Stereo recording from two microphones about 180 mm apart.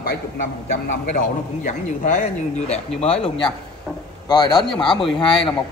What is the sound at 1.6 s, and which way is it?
Speech, 45° left (ahead or behind).